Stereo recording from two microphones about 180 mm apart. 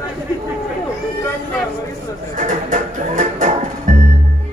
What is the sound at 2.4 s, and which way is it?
Music, 45° right (ahead or behind).